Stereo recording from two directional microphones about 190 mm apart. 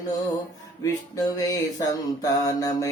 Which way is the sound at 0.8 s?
20° left (ahead or behind).